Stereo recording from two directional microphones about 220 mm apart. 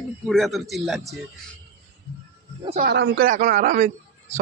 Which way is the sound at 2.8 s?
50° right (ahead or behind).